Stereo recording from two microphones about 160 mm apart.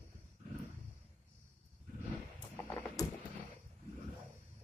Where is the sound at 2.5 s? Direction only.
15° left (ahead or behind).